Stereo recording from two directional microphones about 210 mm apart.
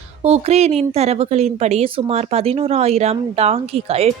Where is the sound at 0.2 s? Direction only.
30° right (ahead or behind).